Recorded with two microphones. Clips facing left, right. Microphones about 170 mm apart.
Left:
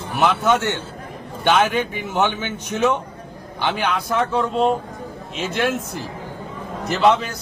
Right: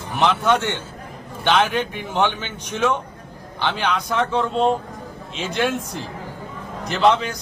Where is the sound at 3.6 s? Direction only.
10° left (ahead or behind).